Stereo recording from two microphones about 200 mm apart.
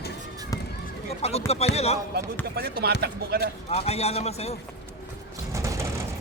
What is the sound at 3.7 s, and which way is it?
Speech, 30° left (ahead or behind).